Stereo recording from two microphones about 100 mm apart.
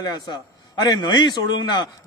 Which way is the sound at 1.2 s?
45° left (ahead or behind).